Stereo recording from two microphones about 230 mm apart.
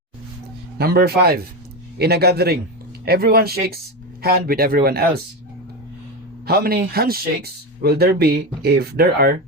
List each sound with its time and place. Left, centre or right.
0.8 s speech: right
6.4 s speech: right